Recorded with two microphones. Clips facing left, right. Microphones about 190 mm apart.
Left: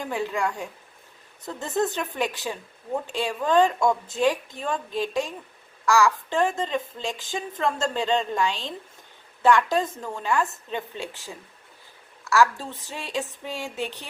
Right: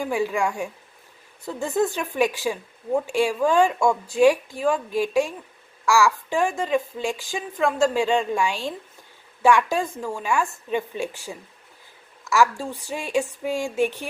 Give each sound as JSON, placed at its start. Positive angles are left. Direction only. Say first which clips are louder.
{"t": 0.0, "sound": "a woman's voice", "louder": "right 4 dB", "side_deg": -10}
{"t": 3.8, "sound": "speech", "louder": "right 2 dB", "side_deg": 20}
{"t": 4.2, "sound": "a woman's voice", "louder": "right 9 dB", "side_deg": -10}
{"t": 12.2, "sound": "a woman's voice", "louder": "right 1 dB", "side_deg": -15}